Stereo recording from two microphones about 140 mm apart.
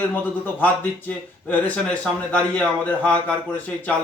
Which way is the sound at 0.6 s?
10° left (ahead or behind).